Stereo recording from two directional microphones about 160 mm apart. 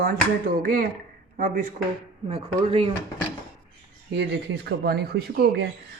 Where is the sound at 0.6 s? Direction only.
65° right (ahead or behind).